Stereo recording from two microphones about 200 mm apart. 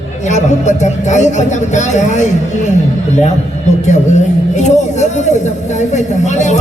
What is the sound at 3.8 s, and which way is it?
A man's voice, 35° left (ahead or behind).